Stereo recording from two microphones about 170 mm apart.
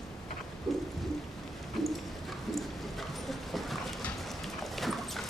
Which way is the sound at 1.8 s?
Centre (ahead or behind).